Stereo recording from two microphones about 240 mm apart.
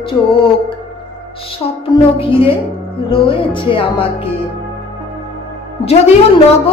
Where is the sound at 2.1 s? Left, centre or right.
Left.